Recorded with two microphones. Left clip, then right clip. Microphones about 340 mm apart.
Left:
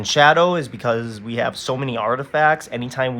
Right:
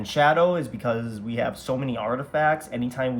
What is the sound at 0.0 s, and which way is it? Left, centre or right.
Speech, centre.